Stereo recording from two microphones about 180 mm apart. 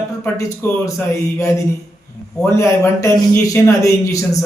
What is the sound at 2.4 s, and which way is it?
A man's voice, 15° left (ahead or behind).